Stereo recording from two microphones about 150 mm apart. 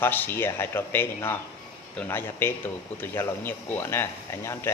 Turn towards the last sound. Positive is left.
turn(degrees=15)  # may be behind; listen again after turning